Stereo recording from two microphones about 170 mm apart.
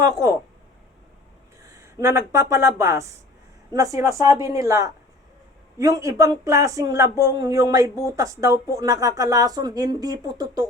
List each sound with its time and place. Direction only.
0.0 s speech: 20° right (ahead or behind)
1.6 s speech: 15° right (ahead or behind)